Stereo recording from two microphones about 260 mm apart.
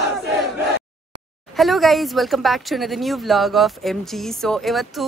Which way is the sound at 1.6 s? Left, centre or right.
Centre.